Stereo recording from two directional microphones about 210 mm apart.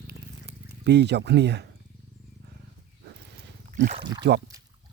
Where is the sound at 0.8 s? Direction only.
55° right (ahead or behind).